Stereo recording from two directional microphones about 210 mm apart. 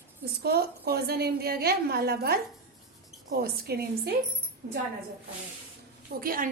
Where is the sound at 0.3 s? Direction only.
50° right (ahead or behind).